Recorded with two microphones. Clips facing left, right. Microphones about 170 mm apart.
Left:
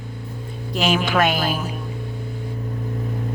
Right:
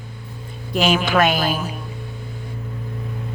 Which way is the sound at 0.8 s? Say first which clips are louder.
Right 1 dB; 90° right.